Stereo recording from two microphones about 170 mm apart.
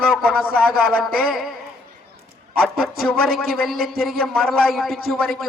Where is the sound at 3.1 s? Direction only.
65° right (ahead or behind).